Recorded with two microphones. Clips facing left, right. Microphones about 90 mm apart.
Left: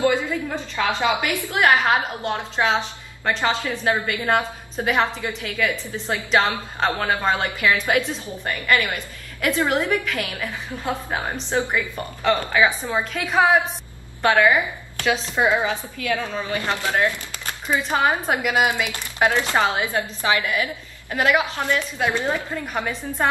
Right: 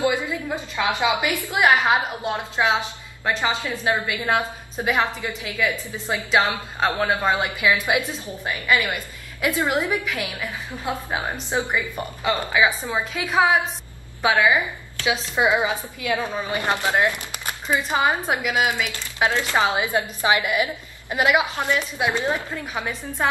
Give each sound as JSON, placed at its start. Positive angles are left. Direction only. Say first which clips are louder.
{"t": 0.0, "sound": "a woman's voice", "louder": "left 2 dB", "side_deg": -15}
{"t": 17.6, "sound": "a woman's voice", "louder": "left 1 dB", "side_deg": -5}
{"t": 18.5, "sound": "speech", "louder": "left 3 dB", "side_deg": 15}
{"t": 19.6, "sound": "a woman's voice", "louder": "even", "side_deg": -15}
{"t": 22.8, "sound": "a woman's voice", "louder": "left 2 dB", "side_deg": 0}